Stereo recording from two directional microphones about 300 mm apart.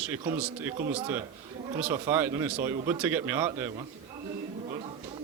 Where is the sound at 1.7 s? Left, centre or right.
Centre.